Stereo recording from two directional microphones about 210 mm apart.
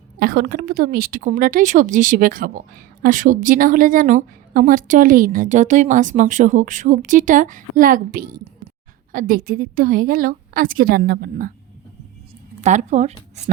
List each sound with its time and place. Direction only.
0.2 s a woman's voice: 45° right (ahead or behind)
12.6 s a woman's voice: 35° right (ahead or behind)